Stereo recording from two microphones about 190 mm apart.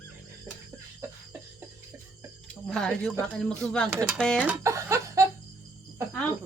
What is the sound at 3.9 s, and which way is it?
Speech, 15° right (ahead or behind).